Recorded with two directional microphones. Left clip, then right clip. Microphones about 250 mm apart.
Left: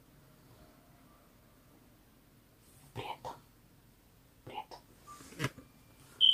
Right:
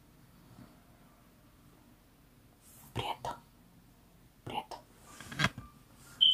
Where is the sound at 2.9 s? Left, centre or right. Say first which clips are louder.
Right 5 dB; right.